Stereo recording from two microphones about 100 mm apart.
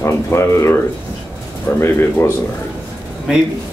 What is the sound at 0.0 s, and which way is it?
Speech, 25° left (ahead or behind).